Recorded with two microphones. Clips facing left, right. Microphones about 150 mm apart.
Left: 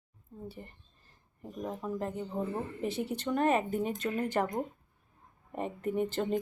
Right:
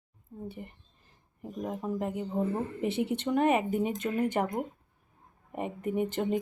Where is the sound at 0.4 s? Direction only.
20° right (ahead or behind).